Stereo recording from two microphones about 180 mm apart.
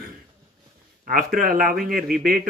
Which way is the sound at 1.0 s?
50° right (ahead or behind).